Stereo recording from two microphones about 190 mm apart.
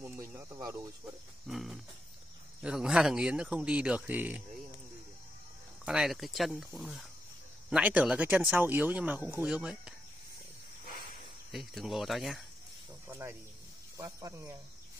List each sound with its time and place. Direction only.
0.4 s speech: 20° right (ahead or behind)
1.5 s speech: centre (ahead or behind)
5.9 s speech: centre (ahead or behind)
11.5 s speech: centre (ahead or behind)
13.1 s speech: 15° right (ahead or behind)